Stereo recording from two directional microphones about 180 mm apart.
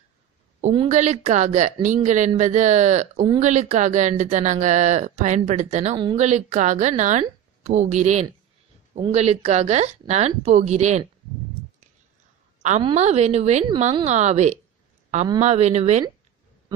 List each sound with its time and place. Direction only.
0.6 s speech: 40° right (ahead or behind)
12.8 s speech: 35° right (ahead or behind)